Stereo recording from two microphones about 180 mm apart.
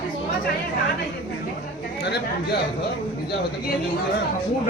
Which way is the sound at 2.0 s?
65° left (ahead or behind).